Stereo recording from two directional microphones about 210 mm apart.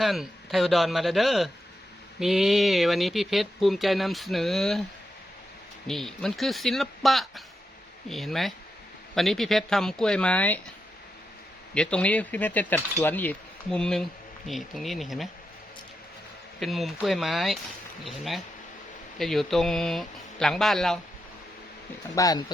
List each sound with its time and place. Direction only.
0.0 s speech: centre (ahead or behind)
5.9 s speech: centre (ahead or behind)
11.7 s speech: 5° left (ahead or behind)
16.6 s speech: centre (ahead or behind)
22.1 s speech: 15° left (ahead or behind)